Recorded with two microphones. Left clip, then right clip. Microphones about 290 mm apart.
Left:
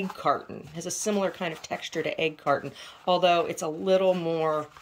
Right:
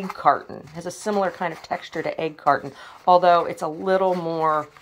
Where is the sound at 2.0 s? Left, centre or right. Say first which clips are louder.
Even; centre.